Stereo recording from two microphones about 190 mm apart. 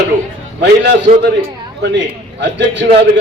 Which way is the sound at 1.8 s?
70° right (ahead or behind).